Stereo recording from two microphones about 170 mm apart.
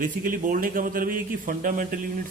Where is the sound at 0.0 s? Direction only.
55° right (ahead or behind).